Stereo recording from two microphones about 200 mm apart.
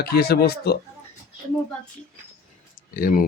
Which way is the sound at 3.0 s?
45° left (ahead or behind).